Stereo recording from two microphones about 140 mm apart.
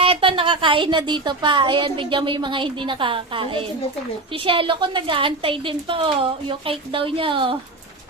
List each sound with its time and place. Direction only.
0.0 s speech: 40° right (ahead or behind)